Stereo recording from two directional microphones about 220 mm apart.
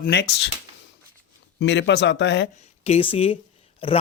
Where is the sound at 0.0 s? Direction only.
50° left (ahead or behind).